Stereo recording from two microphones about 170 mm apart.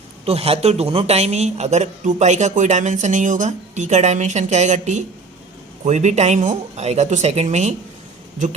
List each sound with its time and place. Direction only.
0.3 s speech: 35° right (ahead or behind)